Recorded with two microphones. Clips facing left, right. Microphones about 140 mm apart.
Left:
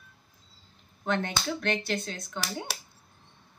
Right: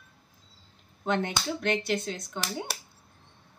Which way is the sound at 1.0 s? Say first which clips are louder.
Right 1 dB; 15° right (ahead or behind).